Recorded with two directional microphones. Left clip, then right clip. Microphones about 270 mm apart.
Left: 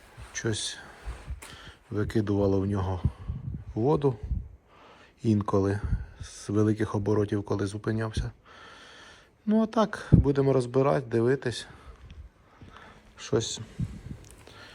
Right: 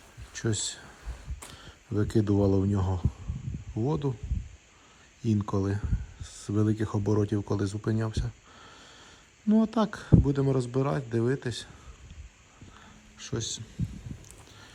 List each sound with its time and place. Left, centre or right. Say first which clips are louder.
0.3 s a man's voice: left 1 dB; centre
5.2 s a man's voice: left 5 dB; centre
12.7 s a sound: left 4 dB; centre